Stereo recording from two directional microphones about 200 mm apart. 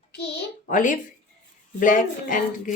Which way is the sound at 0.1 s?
55° left (ahead or behind).